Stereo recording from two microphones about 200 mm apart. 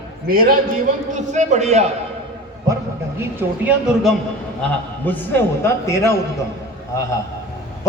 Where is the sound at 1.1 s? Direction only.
35° right (ahead or behind).